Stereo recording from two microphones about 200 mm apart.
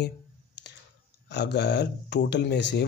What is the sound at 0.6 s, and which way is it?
Clicking, 60° left (ahead or behind).